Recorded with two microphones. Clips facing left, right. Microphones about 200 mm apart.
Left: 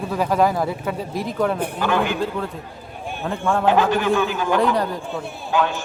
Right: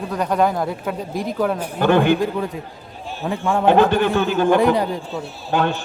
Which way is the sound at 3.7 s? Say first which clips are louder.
Right 4 dB; 60° right (ahead or behind).